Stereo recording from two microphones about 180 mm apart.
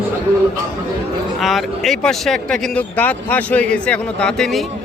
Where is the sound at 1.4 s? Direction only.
Centre (ahead or behind).